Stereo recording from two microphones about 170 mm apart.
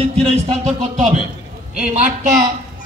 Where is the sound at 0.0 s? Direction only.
35° right (ahead or behind).